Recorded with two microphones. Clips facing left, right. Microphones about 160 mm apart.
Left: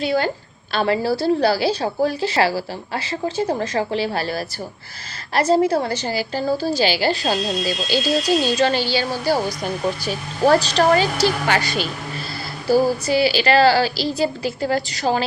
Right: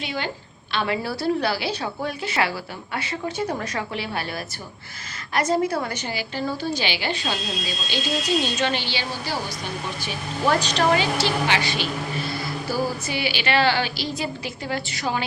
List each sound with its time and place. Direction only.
0.0 s a woman's voice: 35° left (ahead or behind)
13.1 s a woman's voice: 35° left (ahead or behind)